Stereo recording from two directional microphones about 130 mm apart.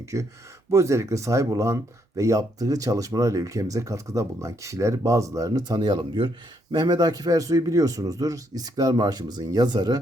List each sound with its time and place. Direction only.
0.0 s speech: 25° right (ahead or behind)